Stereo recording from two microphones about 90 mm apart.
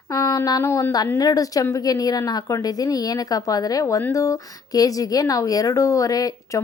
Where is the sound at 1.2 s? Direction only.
45° left (ahead or behind).